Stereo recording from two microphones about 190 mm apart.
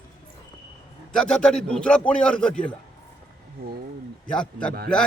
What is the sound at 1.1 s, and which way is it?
Speech, 5° left (ahead or behind).